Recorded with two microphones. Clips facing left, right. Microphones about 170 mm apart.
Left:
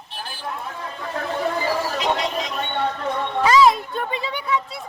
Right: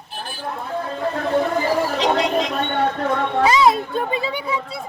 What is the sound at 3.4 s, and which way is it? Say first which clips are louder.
Speech: left 1 dB; 20° right (ahead or behind).